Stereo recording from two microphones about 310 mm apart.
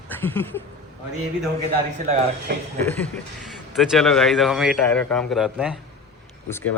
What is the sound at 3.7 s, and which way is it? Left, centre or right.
Speech, centre.